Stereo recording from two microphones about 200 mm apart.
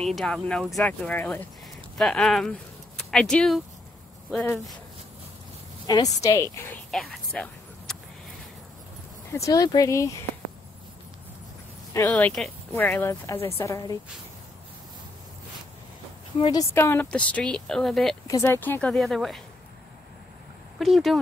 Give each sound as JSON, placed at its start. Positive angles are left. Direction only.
{"t": 0.0, "sound": "speech", "side_deg": 0}
{"t": 5.9, "sound": "speech", "side_deg": 20}
{"t": 6.9, "sound": "a sound", "side_deg": 0}
{"t": 9.3, "sound": "speech", "side_deg": 15}
{"t": 12.1, "sound": "speech", "side_deg": 5}
{"t": 16.3, "sound": "speech", "side_deg": 25}
{"t": 16.7, "sound": "speech", "side_deg": 10}
{"t": 18.2, "sound": "speech", "side_deg": 15}
{"t": 20.8, "sound": "speech", "side_deg": 0}